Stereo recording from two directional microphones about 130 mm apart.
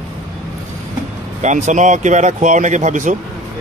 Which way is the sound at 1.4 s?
65° right (ahead or behind).